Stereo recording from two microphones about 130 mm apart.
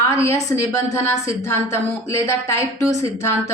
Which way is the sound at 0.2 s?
20° left (ahead or behind).